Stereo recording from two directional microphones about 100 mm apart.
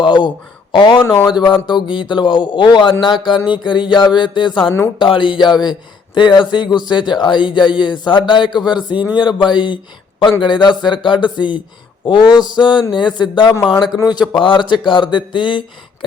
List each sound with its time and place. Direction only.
0.0 s a man's voice: 50° left (ahead or behind)